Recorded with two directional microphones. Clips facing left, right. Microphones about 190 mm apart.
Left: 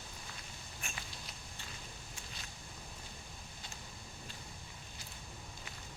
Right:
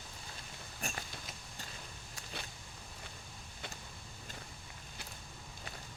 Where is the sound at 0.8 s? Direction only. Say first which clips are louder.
Right 6 dB; 40° right (ahead or behind).